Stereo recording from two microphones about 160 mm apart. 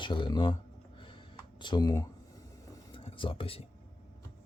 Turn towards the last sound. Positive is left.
turn(degrees=35)  # may be behind; listen again after turning